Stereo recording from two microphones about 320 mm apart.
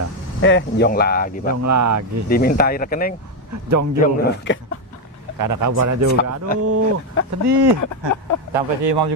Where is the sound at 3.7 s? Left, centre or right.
Right.